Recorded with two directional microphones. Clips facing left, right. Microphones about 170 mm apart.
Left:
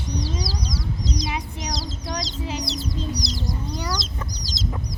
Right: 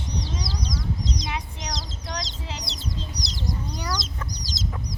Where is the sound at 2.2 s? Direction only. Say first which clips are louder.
Left 7 dB; 5° left (ahead or behind).